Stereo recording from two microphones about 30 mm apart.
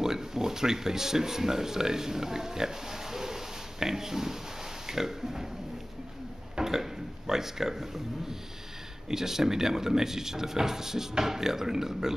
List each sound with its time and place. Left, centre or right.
0.0 s speech: centre
6.6 s speech: centre